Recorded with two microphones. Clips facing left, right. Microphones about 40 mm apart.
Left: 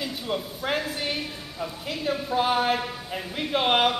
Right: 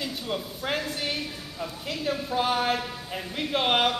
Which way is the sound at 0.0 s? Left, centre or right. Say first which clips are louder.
Left 2 dB; centre.